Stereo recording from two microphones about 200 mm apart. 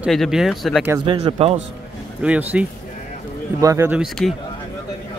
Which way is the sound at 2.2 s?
5° right (ahead or behind).